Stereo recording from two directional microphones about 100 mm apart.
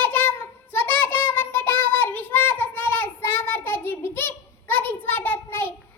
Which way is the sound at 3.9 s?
20° left (ahead or behind).